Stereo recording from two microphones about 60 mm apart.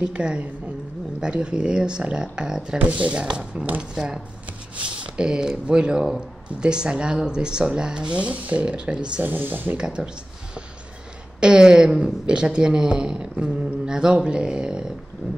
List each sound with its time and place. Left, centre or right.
0.0 s speech: centre
9.2 s speech: right
9.8 s speech: centre
11.3 s speech: centre